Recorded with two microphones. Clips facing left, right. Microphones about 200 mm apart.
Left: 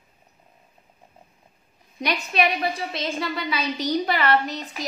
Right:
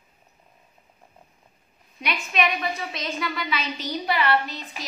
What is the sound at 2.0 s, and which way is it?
A woman's voice, 35° left (ahead or behind).